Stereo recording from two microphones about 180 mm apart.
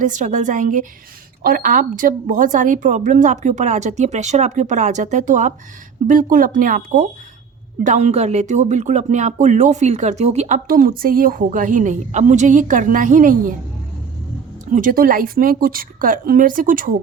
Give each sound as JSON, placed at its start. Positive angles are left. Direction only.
{"t": 0.0, "sound": "speech", "side_deg": -45}
{"t": 14.7, "sound": "speech", "side_deg": -50}